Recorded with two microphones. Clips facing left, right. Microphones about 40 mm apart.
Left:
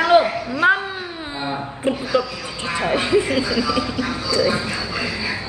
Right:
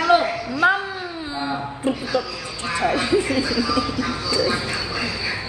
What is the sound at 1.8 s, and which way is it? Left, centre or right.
Speech, left.